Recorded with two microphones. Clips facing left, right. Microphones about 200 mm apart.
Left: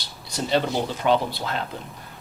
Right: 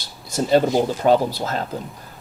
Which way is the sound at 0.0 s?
45° right (ahead or behind).